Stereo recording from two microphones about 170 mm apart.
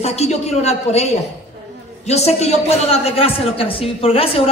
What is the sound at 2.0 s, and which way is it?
A man's voice, 40° left (ahead or behind).